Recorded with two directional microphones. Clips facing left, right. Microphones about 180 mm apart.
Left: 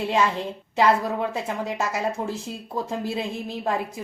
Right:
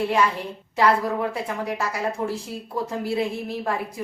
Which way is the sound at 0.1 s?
20° left (ahead or behind).